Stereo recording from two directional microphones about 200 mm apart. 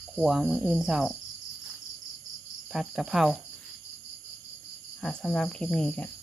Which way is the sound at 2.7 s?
Centre (ahead or behind).